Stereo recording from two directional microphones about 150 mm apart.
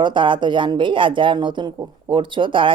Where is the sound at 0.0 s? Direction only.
30° right (ahead or behind).